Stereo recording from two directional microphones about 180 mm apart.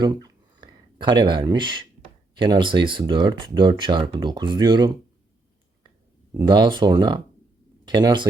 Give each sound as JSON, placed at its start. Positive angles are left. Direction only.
{"t": 0.0, "sound": "a sound", "side_deg": -25}
{"t": 2.3, "sound": "speech", "side_deg": -25}
{"t": 6.4, "sound": "speech", "side_deg": -25}